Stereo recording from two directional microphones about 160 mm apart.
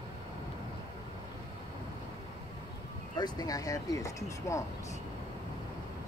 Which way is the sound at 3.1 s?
25° left (ahead or behind).